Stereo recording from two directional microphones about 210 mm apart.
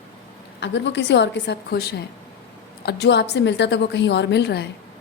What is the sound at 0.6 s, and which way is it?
A woman's voice, 60° left (ahead or behind).